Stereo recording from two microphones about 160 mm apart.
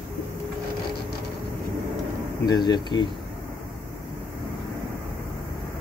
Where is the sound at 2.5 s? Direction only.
25° left (ahead or behind).